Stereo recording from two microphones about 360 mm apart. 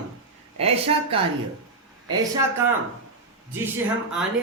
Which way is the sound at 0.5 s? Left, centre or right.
Centre.